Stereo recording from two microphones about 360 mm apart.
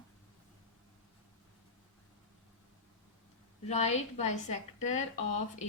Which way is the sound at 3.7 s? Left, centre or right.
Centre.